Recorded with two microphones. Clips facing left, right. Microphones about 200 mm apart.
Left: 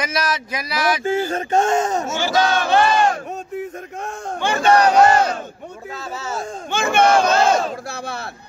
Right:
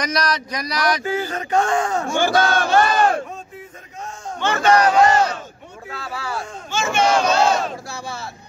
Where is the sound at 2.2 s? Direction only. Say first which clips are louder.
Right 2 dB; 50° right (ahead or behind).